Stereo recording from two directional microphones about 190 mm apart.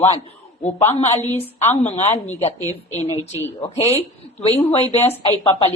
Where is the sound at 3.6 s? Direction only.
30° left (ahead or behind).